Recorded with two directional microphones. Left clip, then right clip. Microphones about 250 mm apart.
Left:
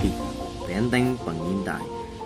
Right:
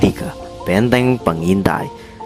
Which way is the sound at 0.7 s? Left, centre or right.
Right.